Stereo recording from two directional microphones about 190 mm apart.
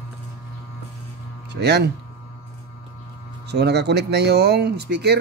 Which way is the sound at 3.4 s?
60° right (ahead or behind).